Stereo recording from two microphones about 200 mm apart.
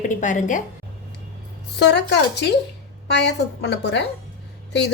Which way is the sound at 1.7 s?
60° left (ahead or behind).